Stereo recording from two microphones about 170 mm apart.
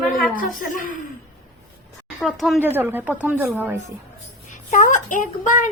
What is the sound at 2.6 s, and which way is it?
Speech, 10° right (ahead or behind).